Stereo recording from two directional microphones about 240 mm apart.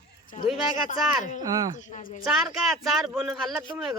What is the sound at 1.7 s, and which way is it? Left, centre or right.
Speech, left.